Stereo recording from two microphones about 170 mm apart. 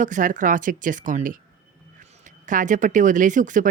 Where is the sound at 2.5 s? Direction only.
50° right (ahead or behind).